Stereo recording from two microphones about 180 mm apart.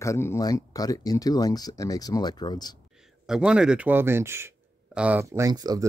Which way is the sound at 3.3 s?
5° right (ahead or behind).